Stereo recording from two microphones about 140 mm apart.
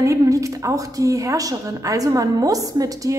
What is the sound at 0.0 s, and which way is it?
A woman's voice, 25° right (ahead or behind).